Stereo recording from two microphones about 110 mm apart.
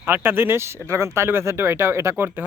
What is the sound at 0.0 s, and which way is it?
A man's voice, 20° right (ahead or behind).